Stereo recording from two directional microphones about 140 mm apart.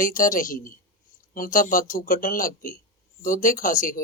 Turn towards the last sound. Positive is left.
turn(degrees=80)